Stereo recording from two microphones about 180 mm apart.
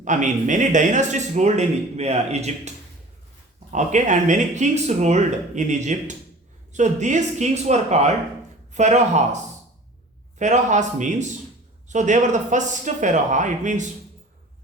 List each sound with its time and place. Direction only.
0.0 s speech: 45° right (ahead or behind)